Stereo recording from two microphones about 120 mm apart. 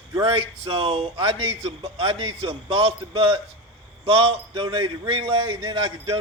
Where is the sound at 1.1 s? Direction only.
40° right (ahead or behind).